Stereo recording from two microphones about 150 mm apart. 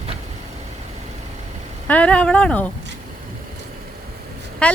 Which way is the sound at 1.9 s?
10° left (ahead or behind).